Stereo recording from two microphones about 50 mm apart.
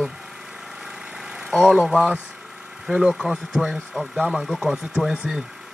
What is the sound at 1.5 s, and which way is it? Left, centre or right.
Speech, centre.